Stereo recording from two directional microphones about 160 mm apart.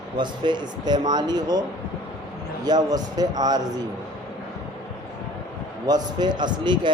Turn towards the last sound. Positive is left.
turn(degrees=-30)  # may be behind; listen again after turning